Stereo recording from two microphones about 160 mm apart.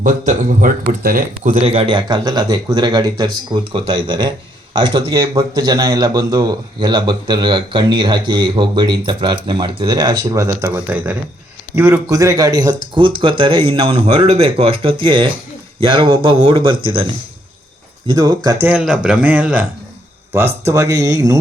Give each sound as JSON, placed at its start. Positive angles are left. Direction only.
{"t": 0.0, "sound": "speech", "side_deg": -55}
{"t": 1.5, "sound": "speech", "side_deg": -40}
{"t": 18.1, "sound": "speech", "side_deg": -25}
{"t": 18.6, "sound": "speech", "side_deg": -10}